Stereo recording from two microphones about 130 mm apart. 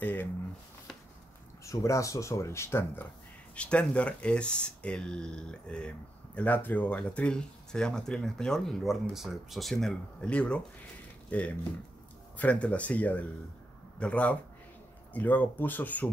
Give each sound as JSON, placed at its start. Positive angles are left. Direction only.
{"t": 0.0, "sound": "speech", "side_deg": 15}
{"t": 1.6, "sound": "speech", "side_deg": 25}
{"t": 3.5, "sound": "speech", "side_deg": 10}